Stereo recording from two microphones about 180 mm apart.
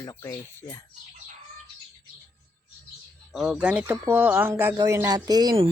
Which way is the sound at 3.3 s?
Centre (ahead or behind).